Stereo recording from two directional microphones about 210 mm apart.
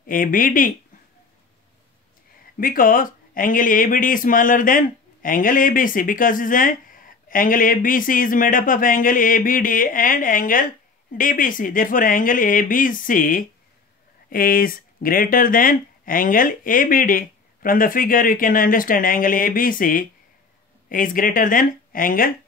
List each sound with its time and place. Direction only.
0.0 s speech: 40° left (ahead or behind)
2.5 s speech: 40° left (ahead or behind)